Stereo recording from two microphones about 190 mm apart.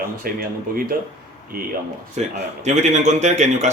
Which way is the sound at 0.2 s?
50° right (ahead or behind).